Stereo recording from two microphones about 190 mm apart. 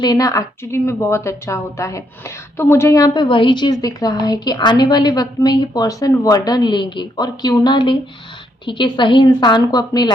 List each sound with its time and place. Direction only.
0.0 s a woman's voice: 20° left (ahead or behind)